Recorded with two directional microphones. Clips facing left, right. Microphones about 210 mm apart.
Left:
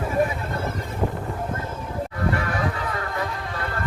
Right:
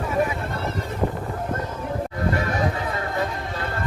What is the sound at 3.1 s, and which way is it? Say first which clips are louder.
Music: right 2 dB; 25° right (ahead or behind).